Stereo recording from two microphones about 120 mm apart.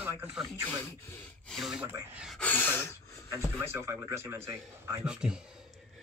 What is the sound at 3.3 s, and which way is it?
A man's voice, 25° right (ahead or behind).